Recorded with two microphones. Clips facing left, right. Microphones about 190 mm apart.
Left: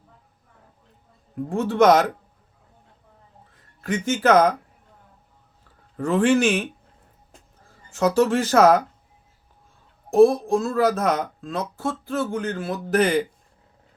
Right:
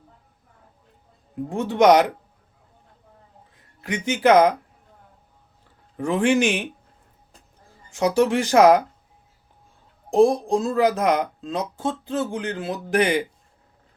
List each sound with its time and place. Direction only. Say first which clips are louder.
1.5 s speech: right 1 dB; 15° right (ahead or behind)
3.8 s speech: left 2 dB; 15° right (ahead or behind)
6.0 s speech: left 1 dB; 15° right (ahead or behind)
7.9 s speech: even; 15° right (ahead or behind)
10.1 s speech: left 2 dB; 15° right (ahead or behind)